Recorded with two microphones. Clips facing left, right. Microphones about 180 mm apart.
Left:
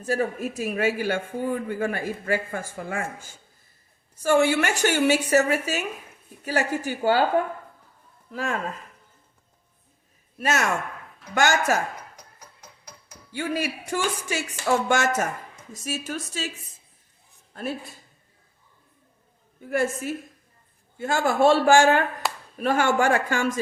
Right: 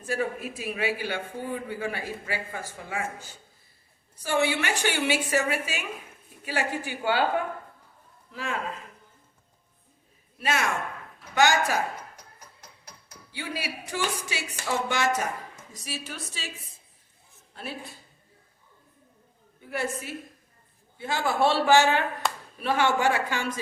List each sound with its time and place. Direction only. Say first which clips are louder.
0.0 s a man's voice: left 4 dB; 40° left (ahead or behind)
8.3 s a man's voice: left 4 dB; 45° left (ahead or behind)
10.4 s a man's voice: left 3 dB; 45° left (ahead or behind)
13.3 s a man's voice: left 7 dB; 50° left (ahead or behind)
19.7 s a man's voice: left 6 dB; 45° left (ahead or behind)
22.2 s clapping: even; centre (ahead or behind)
22.6 s a man's voice: left 3 dB; 45° left (ahead or behind)